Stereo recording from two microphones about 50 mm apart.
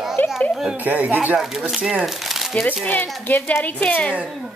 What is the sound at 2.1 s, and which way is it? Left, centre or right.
Crumpling, centre.